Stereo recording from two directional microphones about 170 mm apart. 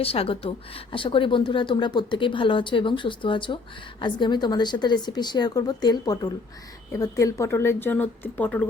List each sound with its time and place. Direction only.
0.0 s a woman's voice: 35° left (ahead or behind); by 8.6 s 10° left (ahead or behind)